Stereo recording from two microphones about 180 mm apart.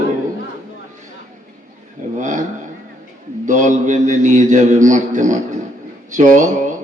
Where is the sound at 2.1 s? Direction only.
45° right (ahead or behind).